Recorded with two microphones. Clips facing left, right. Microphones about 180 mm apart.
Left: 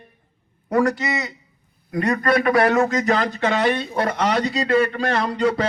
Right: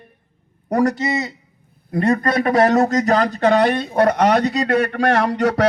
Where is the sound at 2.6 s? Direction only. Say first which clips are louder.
Right 3 dB; 40° right (ahead or behind); by 5.6 s 70° right (ahead or behind).